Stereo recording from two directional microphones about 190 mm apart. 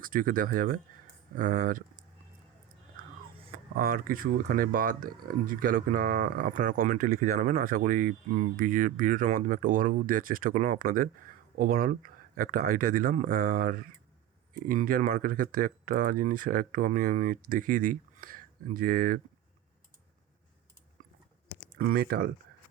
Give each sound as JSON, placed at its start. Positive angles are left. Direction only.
{"t": 0.0, "sound": "speech", "side_deg": -45}
{"t": 3.8, "sound": "speech", "side_deg": -50}
{"t": 21.8, "sound": "speech", "side_deg": -50}